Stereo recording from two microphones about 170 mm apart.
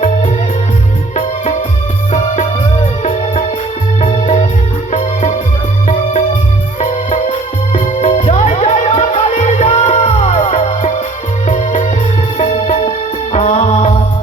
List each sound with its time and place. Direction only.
4.9 s music: 45° left (ahead or behind)
6.7 s music: 45° left (ahead or behind)